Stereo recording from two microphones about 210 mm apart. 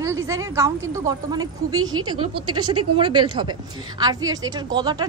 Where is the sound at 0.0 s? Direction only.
15° right (ahead or behind).